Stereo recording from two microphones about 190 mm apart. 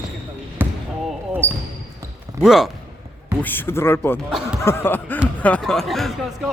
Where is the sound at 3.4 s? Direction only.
10° left (ahead or behind).